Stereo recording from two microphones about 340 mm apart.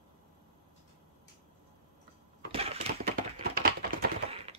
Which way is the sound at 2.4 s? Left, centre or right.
Centre.